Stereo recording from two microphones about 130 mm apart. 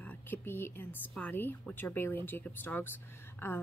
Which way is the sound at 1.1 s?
15° left (ahead or behind).